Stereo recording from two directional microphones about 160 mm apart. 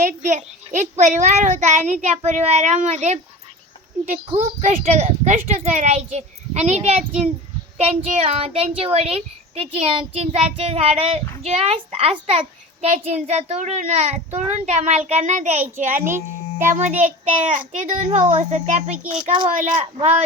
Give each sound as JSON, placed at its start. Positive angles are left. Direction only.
{"t": 0.0, "sound": "a child's voice", "side_deg": -50}
{"t": 4.3, "sound": "a child's voice", "side_deg": -40}
{"t": 16.0, "sound": "a child's voice", "side_deg": -15}
{"t": 16.6, "sound": "a child's voice", "side_deg": -50}